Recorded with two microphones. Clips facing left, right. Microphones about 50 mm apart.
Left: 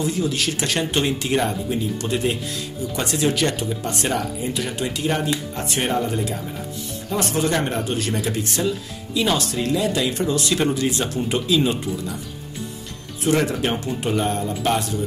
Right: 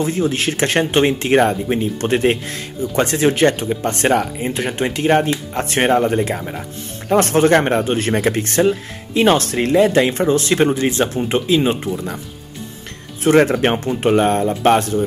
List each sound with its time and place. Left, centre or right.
0.0 s speech: right
13.2 s speech: right